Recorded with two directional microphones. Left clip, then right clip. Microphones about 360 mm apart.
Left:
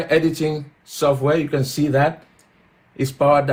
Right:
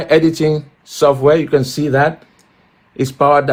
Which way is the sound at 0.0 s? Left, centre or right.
Right.